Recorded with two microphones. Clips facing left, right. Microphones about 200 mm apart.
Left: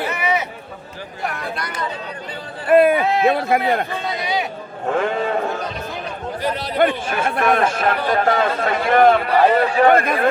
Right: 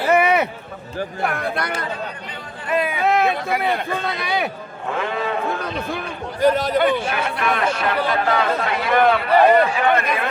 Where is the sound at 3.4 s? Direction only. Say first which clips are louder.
Left 3 dB; 50° left (ahead or behind).